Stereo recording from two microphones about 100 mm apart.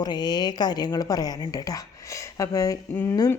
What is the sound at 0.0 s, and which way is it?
Speech, 45° left (ahead or behind).